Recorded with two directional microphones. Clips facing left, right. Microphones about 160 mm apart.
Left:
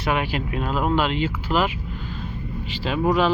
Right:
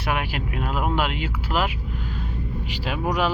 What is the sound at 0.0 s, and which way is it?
Speech, 5° right (ahead or behind).